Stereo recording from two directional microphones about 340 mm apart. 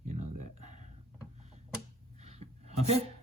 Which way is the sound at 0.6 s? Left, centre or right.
Centre.